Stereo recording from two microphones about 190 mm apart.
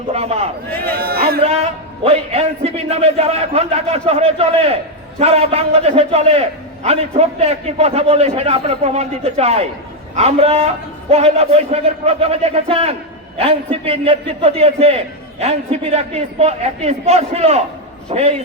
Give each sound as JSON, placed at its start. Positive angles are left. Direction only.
{"t": 0.1, "sound": "a man's voice", "side_deg": -35}
{"t": 0.7, "sound": "speech", "side_deg": 10}
{"t": 1.0, "sound": "a sound", "side_deg": -55}
{"t": 2.0, "sound": "a man's voice", "side_deg": -30}